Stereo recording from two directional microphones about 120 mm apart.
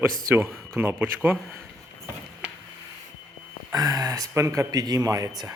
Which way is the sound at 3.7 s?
30° right (ahead or behind).